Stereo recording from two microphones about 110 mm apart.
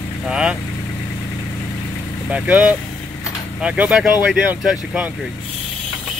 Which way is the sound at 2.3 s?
15° right (ahead or behind).